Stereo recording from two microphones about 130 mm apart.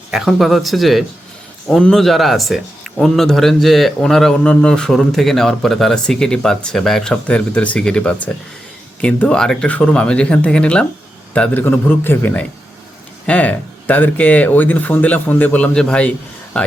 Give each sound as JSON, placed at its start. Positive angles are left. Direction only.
{"t": 0.1, "sound": "a man's voice", "side_deg": 0}